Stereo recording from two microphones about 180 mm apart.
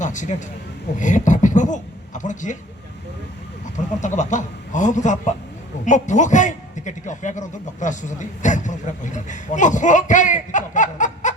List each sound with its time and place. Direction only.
0.0 s a man's voice: 45° left (ahead or behind)
4.0 s a man's voice: 45° left (ahead or behind)